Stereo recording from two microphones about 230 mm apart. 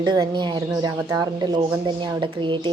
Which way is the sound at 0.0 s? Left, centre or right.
Centre.